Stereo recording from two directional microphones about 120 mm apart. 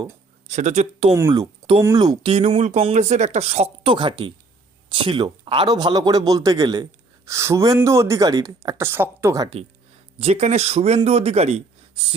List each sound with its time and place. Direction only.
0.4 s speech: 75° right (ahead or behind)
2.0 s a man's voice: 35° right (ahead or behind)
2.3 s speech: 60° right (ahead or behind)
3.8 s a man's voice: 45° right (ahead or behind)
8.9 s speech: 20° right (ahead or behind)
10.2 s speech: 65° right (ahead or behind)